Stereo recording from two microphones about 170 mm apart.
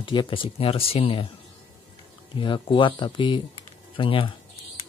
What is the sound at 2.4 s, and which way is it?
Speech, 30° left (ahead or behind).